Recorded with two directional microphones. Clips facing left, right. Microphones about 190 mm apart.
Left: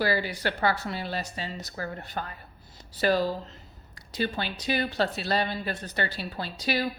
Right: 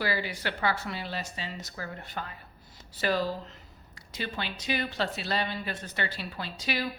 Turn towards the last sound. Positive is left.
turn(degrees=35)  # may be behind; listen again after turning